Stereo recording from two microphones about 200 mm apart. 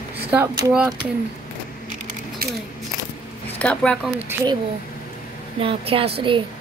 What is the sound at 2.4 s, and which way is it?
Speech, 50° right (ahead or behind).